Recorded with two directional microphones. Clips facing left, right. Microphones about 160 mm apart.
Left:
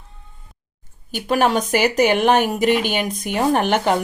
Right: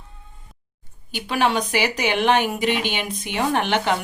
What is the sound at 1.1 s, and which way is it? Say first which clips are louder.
Speech: left 3 dB; 45° left (ahead or behind).